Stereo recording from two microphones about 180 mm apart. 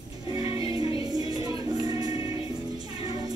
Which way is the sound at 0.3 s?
20° right (ahead or behind).